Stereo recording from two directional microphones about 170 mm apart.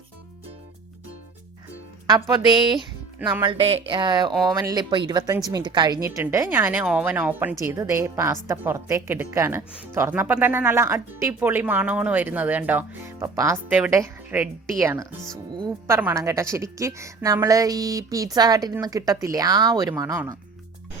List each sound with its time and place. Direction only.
2.5 s a woman's voice: 25° right (ahead or behind)